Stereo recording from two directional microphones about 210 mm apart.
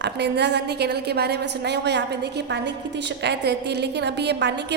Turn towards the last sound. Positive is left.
turn(degrees=-55)  # may be behind; listen again after turning